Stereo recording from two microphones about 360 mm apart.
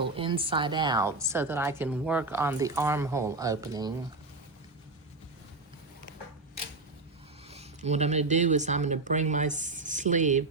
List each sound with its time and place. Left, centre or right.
0.0 s a woman's voice: centre
7.5 s speech: centre